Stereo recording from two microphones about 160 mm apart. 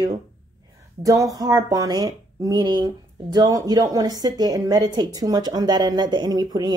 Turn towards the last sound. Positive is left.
turn(degrees=-25)  # may be behind; listen again after turning